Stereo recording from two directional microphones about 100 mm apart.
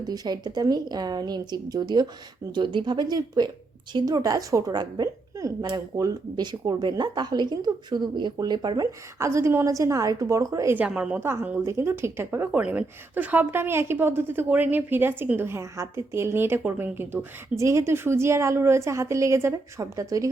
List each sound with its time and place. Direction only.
0.0 s a woman's voice: 40° right (ahead or behind)
9.1 s a woman's voice: 30° right (ahead or behind)
10.8 s a woman's voice: 10° right (ahead or behind)
11.2 s a woman's voice: 25° right (ahead or behind)